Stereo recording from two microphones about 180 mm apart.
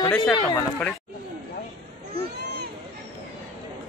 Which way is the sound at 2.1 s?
65° right (ahead or behind).